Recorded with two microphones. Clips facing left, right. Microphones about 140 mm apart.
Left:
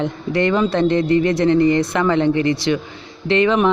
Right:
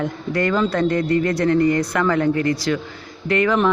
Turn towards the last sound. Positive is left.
turn(degrees=20)  # may be behind; listen again after turning